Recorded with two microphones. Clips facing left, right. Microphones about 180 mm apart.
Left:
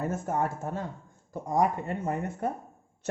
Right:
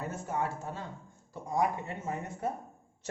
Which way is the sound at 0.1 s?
50° left (ahead or behind).